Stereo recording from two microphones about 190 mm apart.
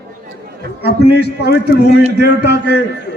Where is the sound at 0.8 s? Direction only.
60° left (ahead or behind).